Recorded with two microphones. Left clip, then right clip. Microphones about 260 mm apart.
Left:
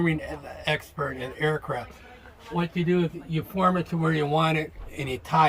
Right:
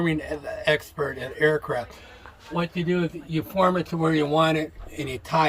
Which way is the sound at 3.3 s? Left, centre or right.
Centre.